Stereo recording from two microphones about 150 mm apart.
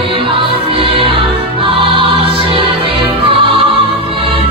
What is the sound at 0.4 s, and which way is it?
Music, 40° right (ahead or behind).